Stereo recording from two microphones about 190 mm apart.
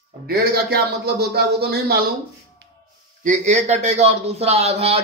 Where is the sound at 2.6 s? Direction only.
60° right (ahead or behind).